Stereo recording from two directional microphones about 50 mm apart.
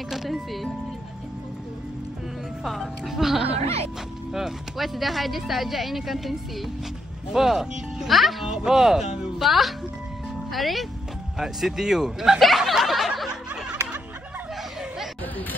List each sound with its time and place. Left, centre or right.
0.1 s music: centre
2.6 s speech: centre